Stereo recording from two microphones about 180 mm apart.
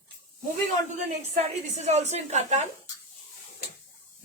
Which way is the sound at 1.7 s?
40° right (ahead or behind).